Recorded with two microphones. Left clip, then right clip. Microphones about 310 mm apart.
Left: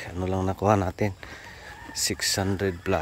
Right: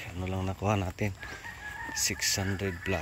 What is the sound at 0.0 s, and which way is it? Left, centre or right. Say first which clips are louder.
Speech: left 8 dB; centre.